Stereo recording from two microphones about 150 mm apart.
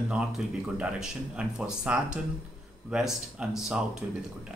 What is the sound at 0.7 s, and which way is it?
Speech, 5° right (ahead or behind).